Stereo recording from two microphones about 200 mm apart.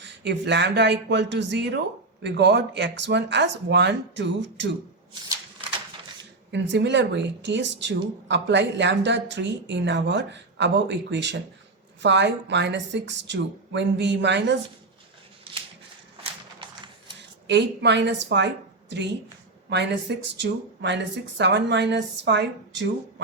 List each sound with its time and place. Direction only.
0.0 s speech: 60° right (ahead or behind)
6.5 s speech: 60° right (ahead or behind)
17.4 s a woman's voice: 60° right (ahead or behind)